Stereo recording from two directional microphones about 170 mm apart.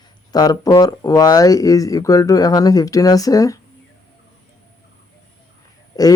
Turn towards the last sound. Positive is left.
turn(degrees=20)  # may be behind; listen again after turning